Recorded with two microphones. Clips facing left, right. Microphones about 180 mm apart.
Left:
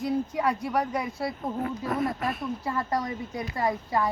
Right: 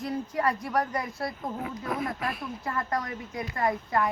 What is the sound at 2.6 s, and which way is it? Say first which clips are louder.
Speech: left 1 dB; 10° left (ahead or behind).